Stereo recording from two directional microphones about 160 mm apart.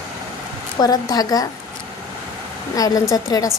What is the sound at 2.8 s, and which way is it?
Speech, 20° left (ahead or behind).